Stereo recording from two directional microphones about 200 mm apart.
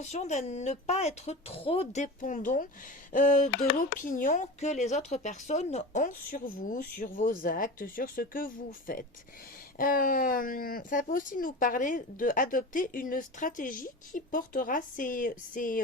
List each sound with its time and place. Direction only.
0.0 s speech: 35° left (ahead or behind)